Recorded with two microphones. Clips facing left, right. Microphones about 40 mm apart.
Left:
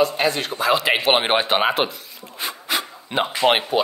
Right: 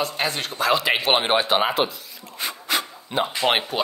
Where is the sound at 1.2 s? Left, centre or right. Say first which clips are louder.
Left 1 dB; centre.